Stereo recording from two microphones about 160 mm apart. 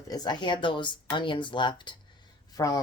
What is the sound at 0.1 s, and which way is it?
Speech, 25° left (ahead or behind).